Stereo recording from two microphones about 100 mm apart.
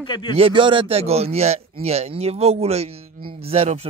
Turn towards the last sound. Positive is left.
turn(degrees=-80)